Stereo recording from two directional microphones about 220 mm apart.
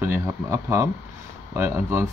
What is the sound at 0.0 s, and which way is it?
Speech, 10° right (ahead or behind).